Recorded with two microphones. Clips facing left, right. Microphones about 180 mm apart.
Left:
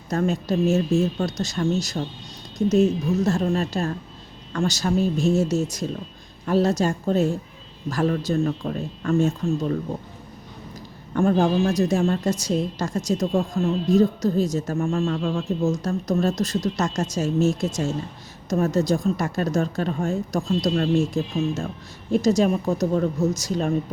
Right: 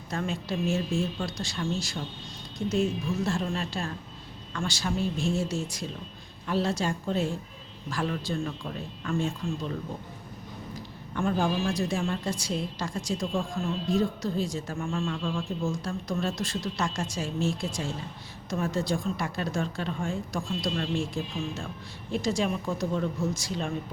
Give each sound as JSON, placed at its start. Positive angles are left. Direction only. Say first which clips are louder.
{"t": 0.1, "sound": "speech", "louder": "left 9 dB", "side_deg": 45}
{"t": 10.8, "sound": "speech", "louder": "left 9 dB", "side_deg": 45}